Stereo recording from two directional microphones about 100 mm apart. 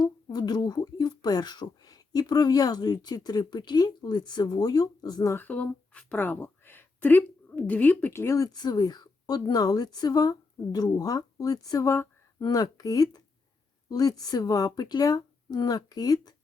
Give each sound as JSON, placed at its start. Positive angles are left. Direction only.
{"t": 0.0, "sound": "speech", "side_deg": 40}
{"t": 5.3, "sound": "speech", "side_deg": 20}
{"t": 8.4, "sound": "a woman's voice", "side_deg": 40}